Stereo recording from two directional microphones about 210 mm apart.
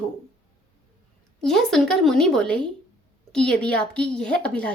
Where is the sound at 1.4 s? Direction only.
Centre (ahead or behind).